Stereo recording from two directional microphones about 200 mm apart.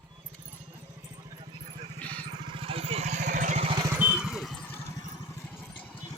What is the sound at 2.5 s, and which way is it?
Vehicle, 30° right (ahead or behind).